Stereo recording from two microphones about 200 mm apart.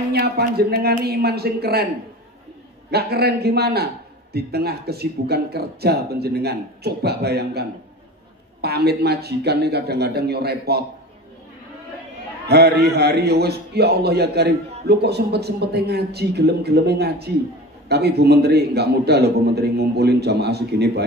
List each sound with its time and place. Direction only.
0.1 s a man's voice: 55° right (ahead or behind)
2.9 s a man's voice: 50° right (ahead or behind)
12.4 s a man's voice: 55° right (ahead or behind)